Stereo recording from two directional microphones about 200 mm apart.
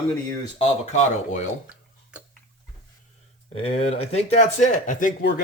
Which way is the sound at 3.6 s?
30° left (ahead or behind).